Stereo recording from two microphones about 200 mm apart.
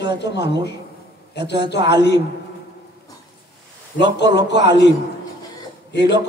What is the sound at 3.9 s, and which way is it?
A man's voice, 60° left (ahead or behind).